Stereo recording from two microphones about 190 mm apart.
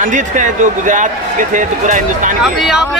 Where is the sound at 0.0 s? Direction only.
40° right (ahead or behind).